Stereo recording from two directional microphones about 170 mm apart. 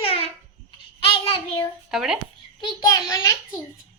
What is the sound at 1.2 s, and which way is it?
Child singing, 30° left (ahead or behind).